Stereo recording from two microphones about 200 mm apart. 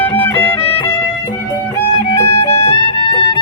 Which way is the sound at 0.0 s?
10° left (ahead or behind).